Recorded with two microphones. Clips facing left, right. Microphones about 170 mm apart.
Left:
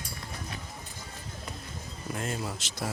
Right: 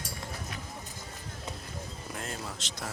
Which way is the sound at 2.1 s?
5° left (ahead or behind).